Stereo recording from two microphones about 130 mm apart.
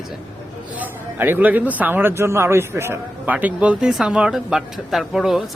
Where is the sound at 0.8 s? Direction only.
15° right (ahead or behind).